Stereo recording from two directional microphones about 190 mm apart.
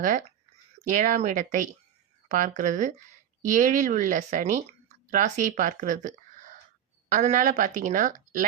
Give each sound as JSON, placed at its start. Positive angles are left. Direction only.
{"t": 0.9, "sound": "speech", "side_deg": -40}